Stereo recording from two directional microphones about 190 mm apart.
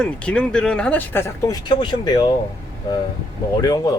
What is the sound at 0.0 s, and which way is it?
Speech, 5° left (ahead or behind).